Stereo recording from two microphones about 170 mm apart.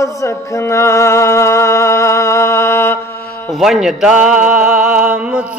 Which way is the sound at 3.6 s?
5° right (ahead or behind).